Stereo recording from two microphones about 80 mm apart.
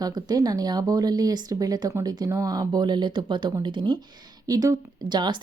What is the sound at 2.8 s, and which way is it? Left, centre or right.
Speech, right.